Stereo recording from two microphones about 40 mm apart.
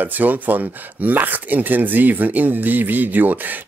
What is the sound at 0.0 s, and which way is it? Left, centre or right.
Speech, right.